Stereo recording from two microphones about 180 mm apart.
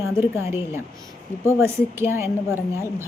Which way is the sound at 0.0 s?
15° right (ahead or behind).